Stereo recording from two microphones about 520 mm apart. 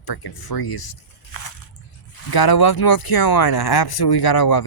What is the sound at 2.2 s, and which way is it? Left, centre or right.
Speech, left.